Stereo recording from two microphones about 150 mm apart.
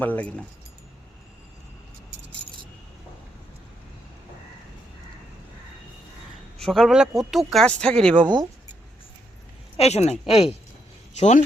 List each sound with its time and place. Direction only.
0.0 s speech: 10° left (ahead or behind)
6.6 s speech: 5° left (ahead or behind)
9.7 s speech: 45° left (ahead or behind)